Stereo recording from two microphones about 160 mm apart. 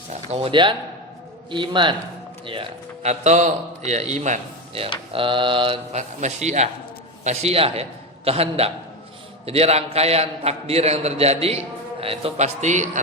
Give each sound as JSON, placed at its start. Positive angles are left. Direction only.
{"t": 0.1, "sound": "a man's voice", "side_deg": -40}
{"t": 5.9, "sound": "a man's voice", "side_deg": -45}